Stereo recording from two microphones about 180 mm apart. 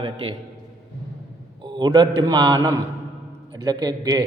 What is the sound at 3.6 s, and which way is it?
Speech, 20° right (ahead or behind).